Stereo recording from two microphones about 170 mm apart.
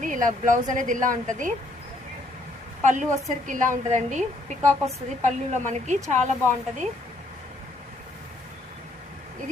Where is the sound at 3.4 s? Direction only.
50° right (ahead or behind).